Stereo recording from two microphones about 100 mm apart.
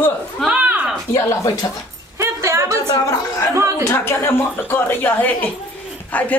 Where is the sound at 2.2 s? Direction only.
30° right (ahead or behind).